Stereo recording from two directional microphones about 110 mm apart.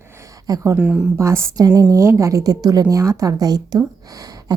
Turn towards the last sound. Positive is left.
turn(degrees=-35)  # may be behind; listen again after turning